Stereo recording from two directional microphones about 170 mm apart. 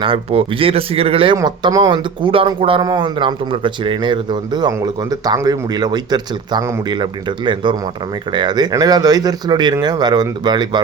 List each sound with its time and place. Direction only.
0.0 s speech: 35° right (ahead or behind)